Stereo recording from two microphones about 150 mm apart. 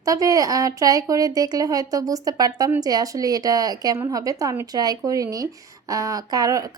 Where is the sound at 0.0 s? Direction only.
25° right (ahead or behind).